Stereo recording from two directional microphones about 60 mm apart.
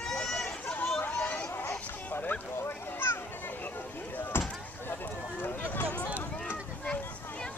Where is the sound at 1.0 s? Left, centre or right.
Left.